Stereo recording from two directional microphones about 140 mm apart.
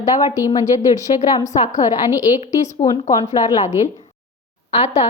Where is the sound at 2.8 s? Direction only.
25° left (ahead or behind).